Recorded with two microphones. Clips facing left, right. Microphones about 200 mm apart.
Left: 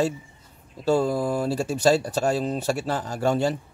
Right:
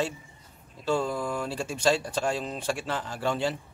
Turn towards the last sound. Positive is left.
turn(degrees=45)  # may be behind; listen again after turning